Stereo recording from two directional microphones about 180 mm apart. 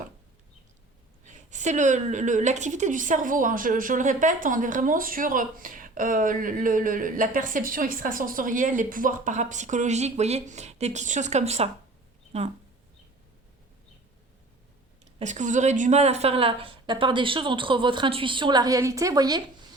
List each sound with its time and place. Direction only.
1.2 s a woman's voice: 40° right (ahead or behind)
15.2 s a woman's voice: 40° right (ahead or behind); by 19.4 s 20° right (ahead or behind)